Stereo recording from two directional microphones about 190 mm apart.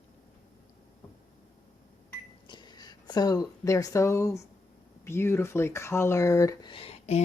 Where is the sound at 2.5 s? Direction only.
25° left (ahead or behind).